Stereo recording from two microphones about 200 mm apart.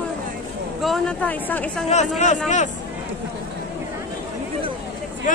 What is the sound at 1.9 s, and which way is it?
Speech, 35° left (ahead or behind).